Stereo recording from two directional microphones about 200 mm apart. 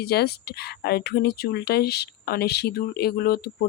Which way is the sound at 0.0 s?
55° left (ahead or behind).